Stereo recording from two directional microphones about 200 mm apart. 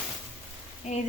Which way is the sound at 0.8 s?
35° left (ahead or behind).